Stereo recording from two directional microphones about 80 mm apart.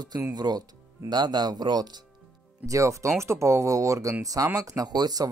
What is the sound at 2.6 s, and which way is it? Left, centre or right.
Speech, right.